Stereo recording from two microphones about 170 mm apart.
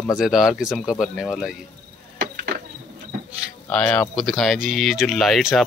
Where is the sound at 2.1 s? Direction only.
70° right (ahead or behind).